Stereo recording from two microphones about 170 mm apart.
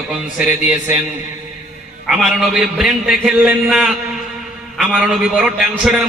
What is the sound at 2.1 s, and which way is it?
A man's voice, centre (ahead or behind).